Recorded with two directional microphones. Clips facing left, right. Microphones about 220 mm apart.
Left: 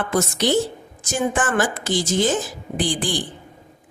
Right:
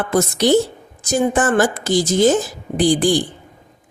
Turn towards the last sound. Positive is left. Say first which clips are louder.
# right 8 dB
turn(degrees=-40)  # may be behind; listen again after turning